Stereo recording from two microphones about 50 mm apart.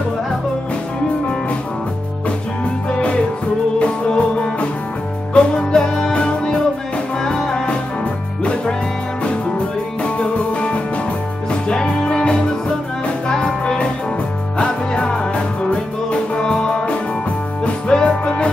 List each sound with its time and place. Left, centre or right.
2.9 s music: left
10.0 s music: left